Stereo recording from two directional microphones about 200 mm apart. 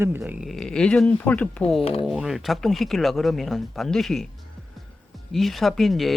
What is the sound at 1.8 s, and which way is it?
Speech, 30° left (ahead or behind).